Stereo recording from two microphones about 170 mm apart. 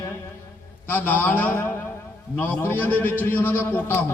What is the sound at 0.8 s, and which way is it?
A man's voice, 10° left (ahead or behind).